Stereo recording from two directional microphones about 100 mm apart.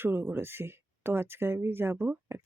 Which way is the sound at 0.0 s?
20° right (ahead or behind).